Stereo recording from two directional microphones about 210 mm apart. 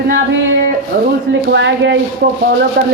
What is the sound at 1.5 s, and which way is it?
Speech, 55° right (ahead or behind).